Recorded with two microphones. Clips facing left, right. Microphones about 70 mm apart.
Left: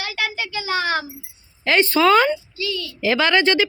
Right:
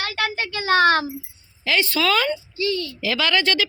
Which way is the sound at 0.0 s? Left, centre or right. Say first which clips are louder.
Right 1 dB; right.